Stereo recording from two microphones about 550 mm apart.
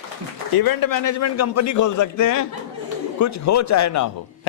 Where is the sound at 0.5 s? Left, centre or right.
Left.